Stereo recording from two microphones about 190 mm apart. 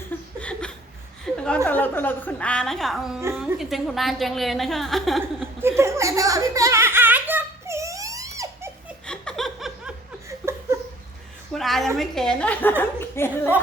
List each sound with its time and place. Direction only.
0.3 s a sound: 5° left (ahead or behind)
1.3 s chuckle: centre (ahead or behind)
1.6 s a woman's voice: 10° left (ahead or behind)
5.5 s giggle: 15° right (ahead or behind)
9.0 s chuckle: 5° left (ahead or behind)
10.2 s a sound: 15° right (ahead or behind)
11.5 s a woman's voice: centre (ahead or behind)